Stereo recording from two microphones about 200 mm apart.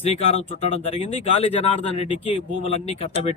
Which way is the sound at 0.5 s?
30° left (ahead or behind).